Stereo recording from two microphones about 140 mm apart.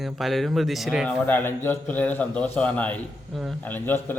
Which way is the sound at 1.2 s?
15° left (ahead or behind).